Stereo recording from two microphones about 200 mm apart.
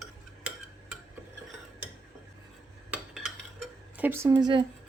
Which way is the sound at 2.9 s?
5° right (ahead or behind).